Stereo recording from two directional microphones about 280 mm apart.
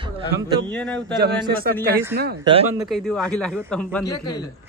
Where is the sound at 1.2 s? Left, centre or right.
Right.